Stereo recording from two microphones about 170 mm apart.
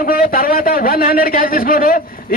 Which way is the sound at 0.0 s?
60° left (ahead or behind).